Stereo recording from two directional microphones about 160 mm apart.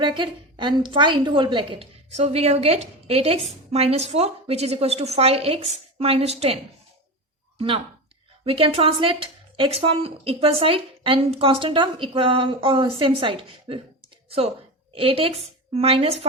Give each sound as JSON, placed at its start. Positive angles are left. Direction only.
{"t": 0.0, "sound": "a woman's voice", "side_deg": -30}
{"t": 8.4, "sound": "a woman's voice", "side_deg": -35}